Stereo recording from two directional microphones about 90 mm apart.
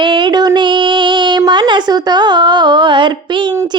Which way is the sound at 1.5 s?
60° right (ahead or behind).